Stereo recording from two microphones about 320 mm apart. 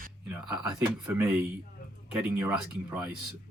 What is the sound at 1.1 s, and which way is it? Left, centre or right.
Speech, centre.